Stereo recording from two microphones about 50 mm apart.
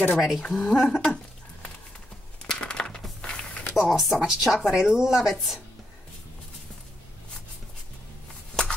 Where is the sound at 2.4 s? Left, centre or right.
Centre.